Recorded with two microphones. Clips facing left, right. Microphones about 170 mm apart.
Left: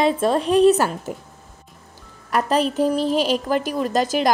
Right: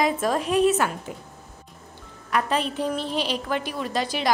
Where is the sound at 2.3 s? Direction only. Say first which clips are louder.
Left 5 dB; 40° left (ahead or behind).